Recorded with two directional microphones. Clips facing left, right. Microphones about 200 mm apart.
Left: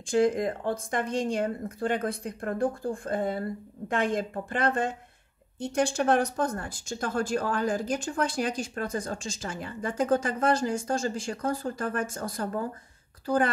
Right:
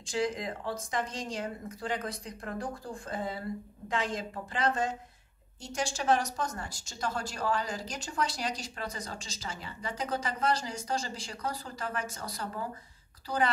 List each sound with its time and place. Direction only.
0.0 s speech: 55° left (ahead or behind)